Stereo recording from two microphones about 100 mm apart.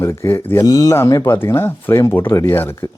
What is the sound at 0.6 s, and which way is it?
Speech, 40° left (ahead or behind).